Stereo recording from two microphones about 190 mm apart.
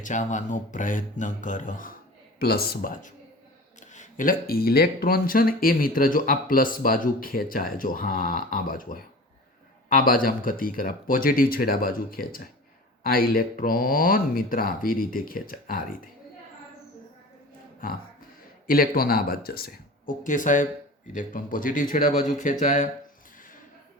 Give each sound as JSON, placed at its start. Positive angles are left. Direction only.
{"t": 0.0, "sound": "speech", "side_deg": 40}
{"t": 2.4, "sound": "speech", "side_deg": 55}
{"t": 18.7, "sound": "speech", "side_deg": 50}